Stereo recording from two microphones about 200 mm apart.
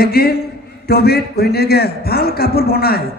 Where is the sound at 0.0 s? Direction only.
50° left (ahead or behind).